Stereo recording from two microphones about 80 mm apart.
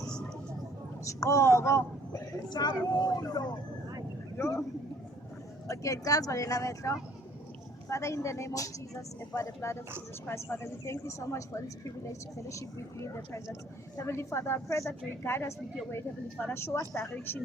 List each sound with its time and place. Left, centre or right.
1.0 s speech: left
2.5 s speech: left
4.4 s speech: left
5.6 s speech: left